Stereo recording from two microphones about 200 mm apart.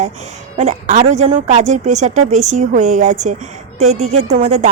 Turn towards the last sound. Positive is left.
turn(degrees=-35)  # may be behind; listen again after turning